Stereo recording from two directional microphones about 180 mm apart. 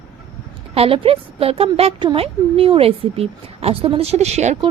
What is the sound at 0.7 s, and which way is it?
A woman's voice, 30° right (ahead or behind).